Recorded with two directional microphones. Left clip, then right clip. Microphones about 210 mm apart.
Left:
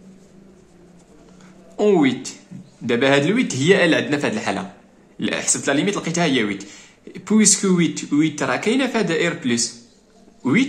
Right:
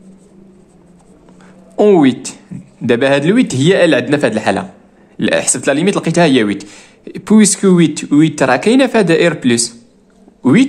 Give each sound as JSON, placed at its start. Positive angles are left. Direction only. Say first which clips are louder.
{"t": 1.8, "sound": "a man's voice", "louder": "right 7 dB", "side_deg": -40}